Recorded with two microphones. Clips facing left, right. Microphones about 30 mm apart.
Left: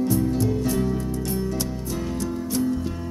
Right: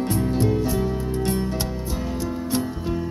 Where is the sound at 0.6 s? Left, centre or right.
Centre.